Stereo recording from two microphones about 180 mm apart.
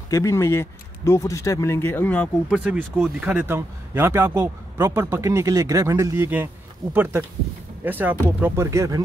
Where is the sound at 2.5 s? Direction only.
5° right (ahead or behind).